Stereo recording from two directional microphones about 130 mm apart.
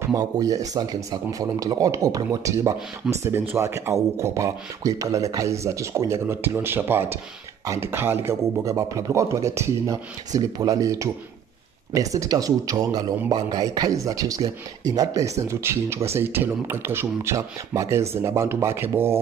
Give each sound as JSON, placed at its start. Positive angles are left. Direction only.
{"t": 0.1, "sound": "speech", "side_deg": -30}